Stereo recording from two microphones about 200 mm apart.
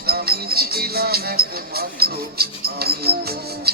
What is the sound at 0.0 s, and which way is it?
Music, 50° right (ahead or behind).